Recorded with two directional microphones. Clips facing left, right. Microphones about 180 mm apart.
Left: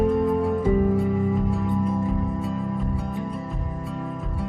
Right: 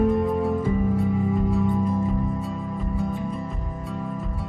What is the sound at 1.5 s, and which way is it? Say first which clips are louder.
Music: right 2 dB; centre (ahead or behind).